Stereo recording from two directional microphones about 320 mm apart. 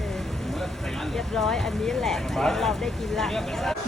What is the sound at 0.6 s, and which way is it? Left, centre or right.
Speech, centre.